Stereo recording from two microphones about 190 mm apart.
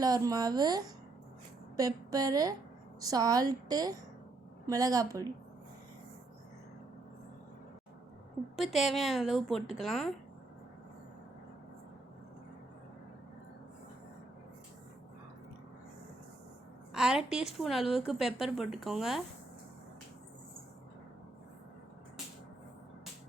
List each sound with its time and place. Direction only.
0.0 s a woman's voice: 20° right (ahead or behind)
8.5 s a woman's voice: centre (ahead or behind)
16.9 s a woman's voice: 5° right (ahead or behind)